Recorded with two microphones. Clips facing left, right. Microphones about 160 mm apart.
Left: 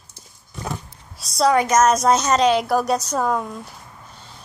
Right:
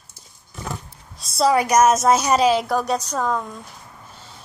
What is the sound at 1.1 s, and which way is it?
A woman's voice, centre (ahead or behind).